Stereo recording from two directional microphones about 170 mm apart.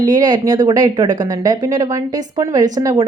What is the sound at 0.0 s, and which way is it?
Speech, 25° right (ahead or behind).